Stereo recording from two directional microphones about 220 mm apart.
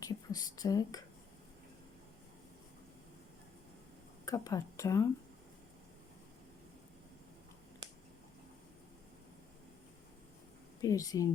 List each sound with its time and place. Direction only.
0.0 s whispering: 15° left (ahead or behind)
4.3 s speech: 15° left (ahead or behind)
10.8 s speech: 15° left (ahead or behind)